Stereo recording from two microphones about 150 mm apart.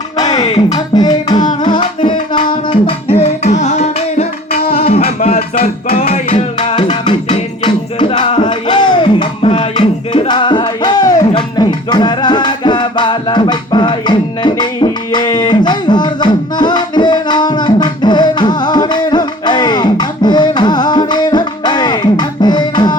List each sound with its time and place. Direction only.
0.7 s music: 25° left (ahead or behind); by 4.3 s 50° left (ahead or behind)
4.7 s music: 40° left (ahead or behind)
5.3 s music: 80° left
6.1 s music: 45° left (ahead or behind)
6.7 s music: 30° left (ahead or behind)
8.3 s a sound: 35° left (ahead or behind)
11.3 s music: 30° left (ahead or behind)